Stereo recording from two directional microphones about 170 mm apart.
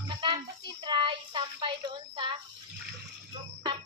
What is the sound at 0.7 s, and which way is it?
A child's voice, 30° right (ahead or behind).